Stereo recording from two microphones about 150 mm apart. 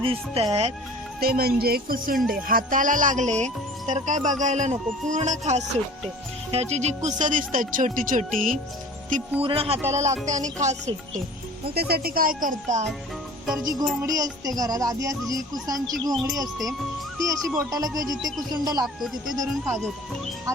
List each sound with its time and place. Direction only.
0.0 s speech: 35° right (ahead or behind)
1.2 s speech: 90° right
2.1 s speech: centre (ahead or behind)
2.5 s speech: 65° right (ahead or behind)
9.4 s speech: 40° right (ahead or behind)
9.9 s speech: 50° right (ahead or behind)
11.7 s speech: 90° right; by 12.8 s 60° right (ahead or behind)
14.0 s music: 25° right (ahead or behind)
17.2 s music: 20° right (ahead or behind)